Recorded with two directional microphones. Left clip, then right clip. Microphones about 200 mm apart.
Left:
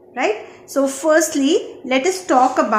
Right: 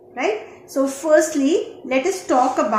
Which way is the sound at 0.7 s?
40° left (ahead or behind).